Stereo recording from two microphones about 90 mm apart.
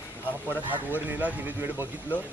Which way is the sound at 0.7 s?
20° right (ahead or behind).